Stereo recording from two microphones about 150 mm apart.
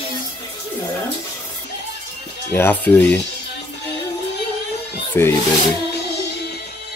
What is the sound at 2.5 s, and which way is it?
Speech, 15° left (ahead or behind).